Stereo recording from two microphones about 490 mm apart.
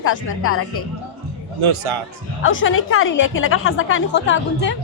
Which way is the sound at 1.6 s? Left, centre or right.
Right.